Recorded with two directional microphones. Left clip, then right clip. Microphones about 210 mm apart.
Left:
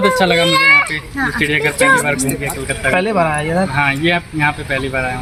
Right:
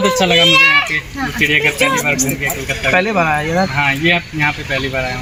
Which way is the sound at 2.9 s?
15° left (ahead or behind).